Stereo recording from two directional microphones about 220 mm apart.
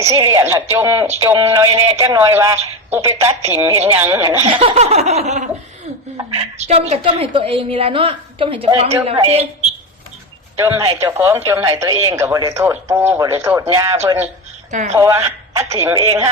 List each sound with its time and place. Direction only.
0.0 s speech: 15° right (ahead or behind)
4.6 s a woman's voice: 30° right (ahead or behind)
10.6 s speech: 10° right (ahead or behind)
14.7 s a woman's voice: 30° right (ahead or behind)
14.9 s speech: 15° right (ahead or behind)